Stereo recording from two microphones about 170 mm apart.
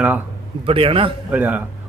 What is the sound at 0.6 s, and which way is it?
Speech, 30° right (ahead or behind).